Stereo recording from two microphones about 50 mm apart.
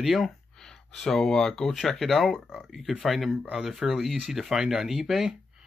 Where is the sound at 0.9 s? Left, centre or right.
Centre.